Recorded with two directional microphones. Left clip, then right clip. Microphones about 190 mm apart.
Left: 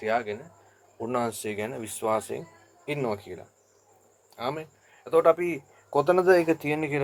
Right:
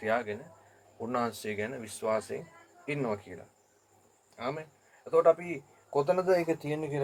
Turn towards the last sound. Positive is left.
turn(degrees=35)  # may be behind; listen again after turning